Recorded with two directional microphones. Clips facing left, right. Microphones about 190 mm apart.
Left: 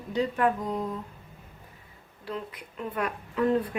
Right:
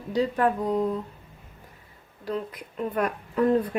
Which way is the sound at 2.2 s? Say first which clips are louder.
Right 5 dB; 40° right (ahead or behind).